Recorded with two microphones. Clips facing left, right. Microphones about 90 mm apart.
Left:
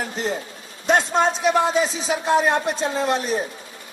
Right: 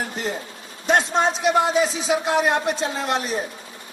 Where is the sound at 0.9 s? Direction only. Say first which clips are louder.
Left 1 dB; 40° left (ahead or behind).